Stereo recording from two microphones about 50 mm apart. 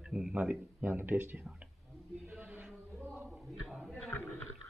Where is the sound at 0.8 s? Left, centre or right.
Right.